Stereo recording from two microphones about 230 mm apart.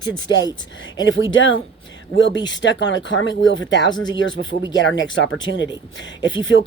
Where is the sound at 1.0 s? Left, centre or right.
Left.